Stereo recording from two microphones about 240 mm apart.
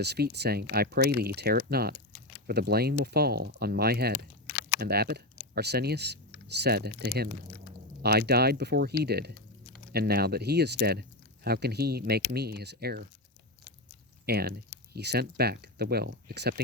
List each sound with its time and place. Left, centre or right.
0.0 s speech: right
14.3 s speech: right